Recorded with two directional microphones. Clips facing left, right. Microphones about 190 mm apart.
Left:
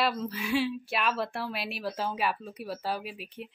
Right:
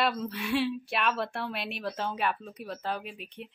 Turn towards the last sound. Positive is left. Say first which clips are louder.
# left 1 dB
turn(degrees=5)  # may be behind; listen again after turning